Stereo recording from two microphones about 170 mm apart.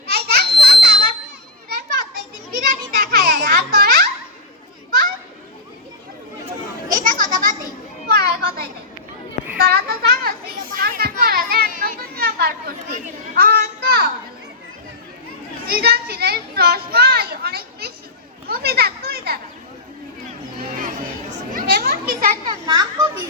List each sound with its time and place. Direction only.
0.1 s a sound: 70° right (ahead or behind)
1.7 s children playing: 70° right (ahead or behind)
6.9 s children playing: 50° right (ahead or behind)
8.0 s children playing: 65° right (ahead or behind)
13.3 s a sound: 60° right (ahead or behind)
15.6 s children playing: 65° right (ahead or behind)
21.5 s children playing: 65° right (ahead or behind)
22.4 s children playing: 25° right (ahead or behind)